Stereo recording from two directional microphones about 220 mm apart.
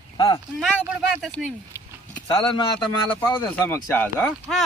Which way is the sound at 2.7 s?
10° left (ahead or behind).